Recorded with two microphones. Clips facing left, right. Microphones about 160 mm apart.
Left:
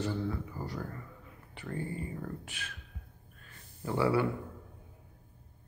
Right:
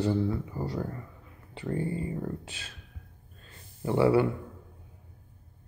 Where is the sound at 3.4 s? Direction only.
25° right (ahead or behind).